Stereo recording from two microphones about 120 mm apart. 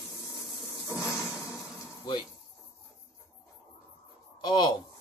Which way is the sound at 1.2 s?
30° left (ahead or behind).